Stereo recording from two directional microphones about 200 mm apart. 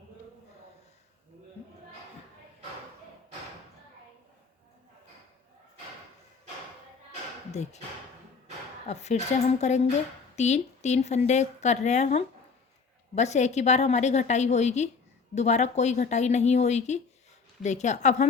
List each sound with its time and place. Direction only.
7.5 s speech: 35° left (ahead or behind)
8.9 s a woman's voice: 35° left (ahead or behind)